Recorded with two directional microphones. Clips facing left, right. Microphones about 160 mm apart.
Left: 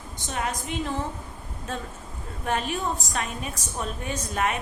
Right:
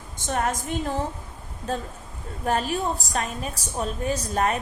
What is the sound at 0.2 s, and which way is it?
Speech, 50° right (ahead or behind).